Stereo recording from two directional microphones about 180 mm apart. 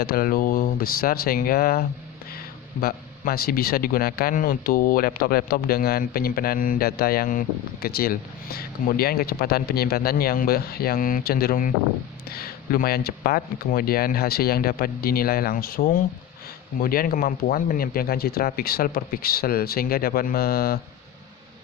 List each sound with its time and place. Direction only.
0.0 s speech: 55° left (ahead or behind)
2.8 s speech: 55° left (ahead or behind)